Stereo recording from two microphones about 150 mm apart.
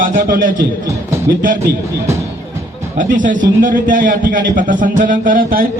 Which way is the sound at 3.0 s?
60° right (ahead or behind).